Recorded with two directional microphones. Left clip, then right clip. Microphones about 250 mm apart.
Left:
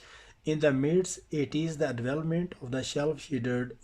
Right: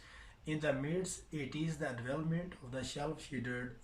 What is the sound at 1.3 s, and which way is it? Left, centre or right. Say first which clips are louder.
Speech: left 11 dB; left.